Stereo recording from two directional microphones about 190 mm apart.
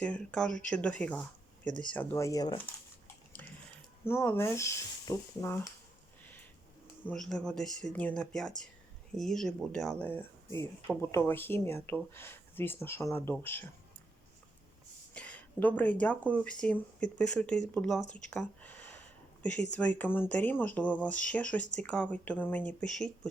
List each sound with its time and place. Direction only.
0.0 s speech: 5° left (ahead or behind)
3.4 s a sound: 10° left (ahead or behind)
4.0 s speech: 10° left (ahead or behind)
7.0 s speech: 5° left (ahead or behind)
15.1 s speech: 5° left (ahead or behind)
18.3 s a sound: 5° left (ahead or behind)
19.7 s speech: 10° left (ahead or behind)